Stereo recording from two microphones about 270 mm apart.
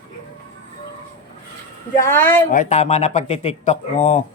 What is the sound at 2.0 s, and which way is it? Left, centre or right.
Speech, centre.